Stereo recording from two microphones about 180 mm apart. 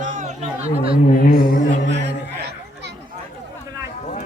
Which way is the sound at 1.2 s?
50° left (ahead or behind).